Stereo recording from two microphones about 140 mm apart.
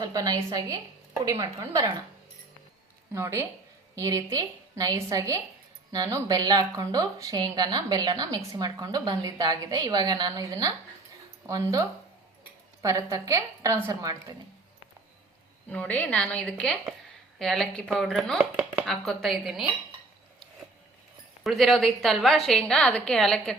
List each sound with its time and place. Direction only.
0.0 s a woman's voice: 25° right (ahead or behind)
3.1 s a woman's voice: 20° right (ahead or behind)
15.7 s a woman's voice: 10° left (ahead or behind)
21.4 s a woman's voice: centre (ahead or behind)